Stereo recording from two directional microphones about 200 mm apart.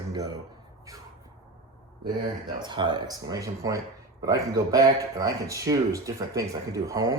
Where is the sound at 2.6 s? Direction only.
20° right (ahead or behind).